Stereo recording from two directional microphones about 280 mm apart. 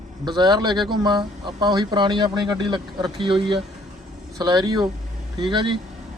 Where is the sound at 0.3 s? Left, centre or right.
Centre.